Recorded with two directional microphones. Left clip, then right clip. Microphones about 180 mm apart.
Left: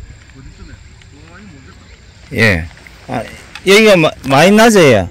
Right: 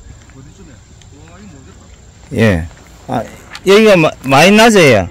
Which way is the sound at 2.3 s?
15° right (ahead or behind).